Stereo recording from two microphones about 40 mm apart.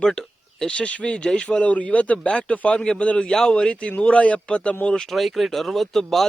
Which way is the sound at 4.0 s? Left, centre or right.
Left.